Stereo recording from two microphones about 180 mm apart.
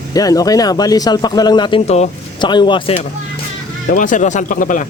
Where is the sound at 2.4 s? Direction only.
25° left (ahead or behind).